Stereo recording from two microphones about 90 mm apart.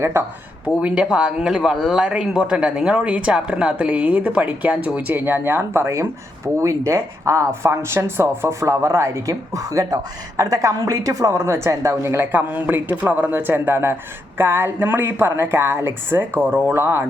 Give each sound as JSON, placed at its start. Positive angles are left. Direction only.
{"t": 0.0, "sound": "speech", "side_deg": -30}
{"t": 0.8, "sound": "speech", "side_deg": -10}